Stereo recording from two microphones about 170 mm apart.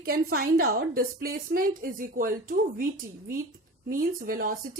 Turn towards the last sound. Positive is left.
turn(degrees=-55)  # may be behind; listen again after turning